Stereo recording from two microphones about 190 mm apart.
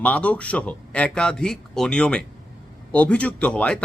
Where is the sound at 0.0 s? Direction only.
5° left (ahead or behind).